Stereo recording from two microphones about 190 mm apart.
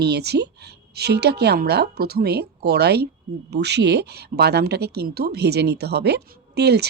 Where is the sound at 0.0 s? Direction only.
60° right (ahead or behind).